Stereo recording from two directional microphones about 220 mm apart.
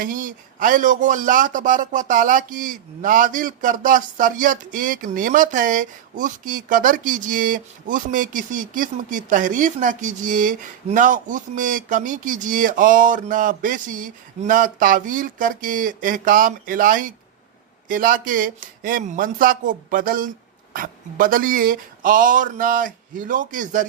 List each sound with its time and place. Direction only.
0.0 s speech: 35° right (ahead or behind)